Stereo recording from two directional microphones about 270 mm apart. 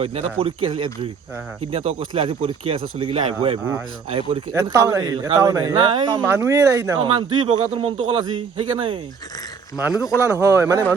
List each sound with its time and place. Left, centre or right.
0.0 s speech: right
9.8 s speech: centre